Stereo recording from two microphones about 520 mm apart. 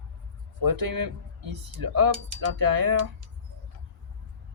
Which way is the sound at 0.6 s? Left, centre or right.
Right.